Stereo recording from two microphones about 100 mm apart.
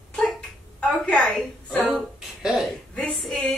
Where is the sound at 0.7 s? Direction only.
10° left (ahead or behind).